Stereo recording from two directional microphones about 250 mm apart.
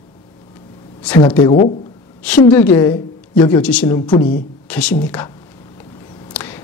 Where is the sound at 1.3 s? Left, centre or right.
Centre.